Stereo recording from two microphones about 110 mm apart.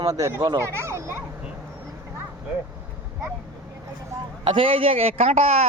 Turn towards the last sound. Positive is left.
turn(degrees=-70)  # may be behind; listen again after turning